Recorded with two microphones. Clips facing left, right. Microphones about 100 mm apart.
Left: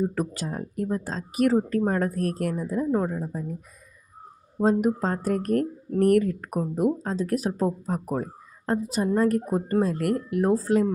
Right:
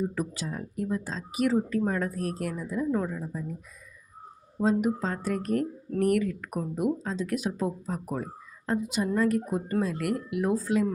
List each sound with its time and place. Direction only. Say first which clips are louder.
0.1 s speech: left 3 dB; 50° left (ahead or behind)
4.6 s speech: left 3 dB; 45° left (ahead or behind)